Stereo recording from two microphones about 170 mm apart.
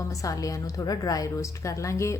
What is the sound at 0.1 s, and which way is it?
A woman's voice, 20° left (ahead or behind).